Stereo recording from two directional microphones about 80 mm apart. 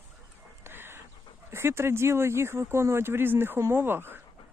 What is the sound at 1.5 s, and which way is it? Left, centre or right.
Speech, right.